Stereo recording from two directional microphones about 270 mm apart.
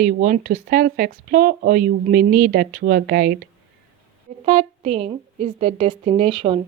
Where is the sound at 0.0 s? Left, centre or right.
Right.